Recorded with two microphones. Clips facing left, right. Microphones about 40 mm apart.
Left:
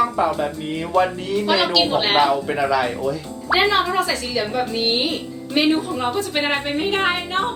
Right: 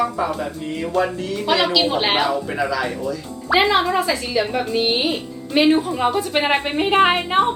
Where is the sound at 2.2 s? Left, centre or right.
Centre.